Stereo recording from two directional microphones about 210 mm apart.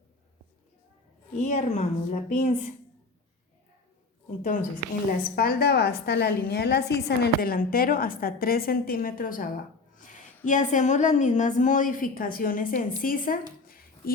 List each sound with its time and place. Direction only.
1.4 s a woman's voice: 30° left (ahead or behind)
5.1 s a woman's voice: 45° left (ahead or behind)